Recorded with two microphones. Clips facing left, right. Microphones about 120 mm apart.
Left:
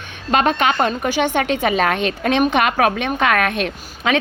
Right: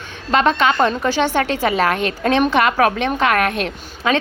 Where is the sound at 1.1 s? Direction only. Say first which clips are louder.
Even; 15° left (ahead or behind).